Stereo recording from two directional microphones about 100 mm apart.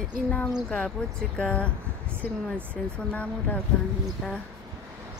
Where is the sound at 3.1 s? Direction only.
15° left (ahead or behind).